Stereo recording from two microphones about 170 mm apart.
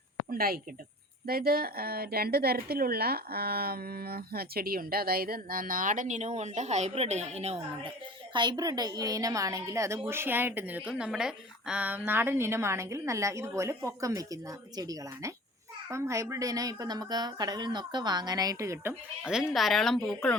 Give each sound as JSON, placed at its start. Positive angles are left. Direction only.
{"t": 0.3, "sound": "a woman's voice", "side_deg": -60}
{"t": 8.3, "sound": "a woman's voice", "side_deg": -25}
{"t": 19.2, "sound": "speech", "side_deg": -5}